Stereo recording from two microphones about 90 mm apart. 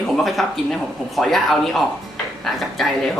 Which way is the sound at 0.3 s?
Centre (ahead or behind).